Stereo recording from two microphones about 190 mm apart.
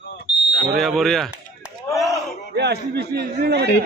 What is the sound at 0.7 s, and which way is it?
Speech, centre (ahead or behind).